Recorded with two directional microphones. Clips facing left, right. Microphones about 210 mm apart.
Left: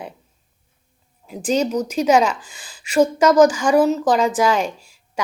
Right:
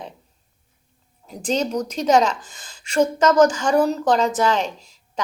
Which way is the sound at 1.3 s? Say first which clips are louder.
Left 3 dB; 5° left (ahead or behind).